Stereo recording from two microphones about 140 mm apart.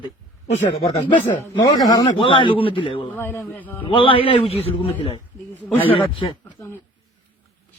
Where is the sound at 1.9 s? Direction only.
30° left (ahead or behind).